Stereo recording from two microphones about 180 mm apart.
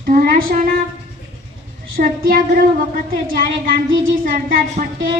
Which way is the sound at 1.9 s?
55° right (ahead or behind).